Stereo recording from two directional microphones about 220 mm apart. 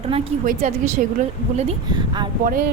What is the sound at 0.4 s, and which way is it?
Speech, 35° right (ahead or behind).